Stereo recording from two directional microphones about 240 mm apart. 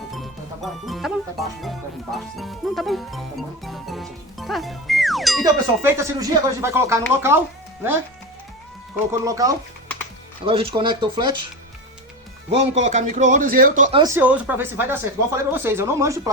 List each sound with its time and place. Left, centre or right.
0.1 s music: centre
5.4 s speech: centre
9.2 s speech: centre
12.5 s speech: right
14.0 s speech: centre